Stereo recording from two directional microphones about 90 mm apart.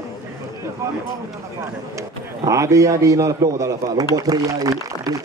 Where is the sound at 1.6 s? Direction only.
35° right (ahead or behind).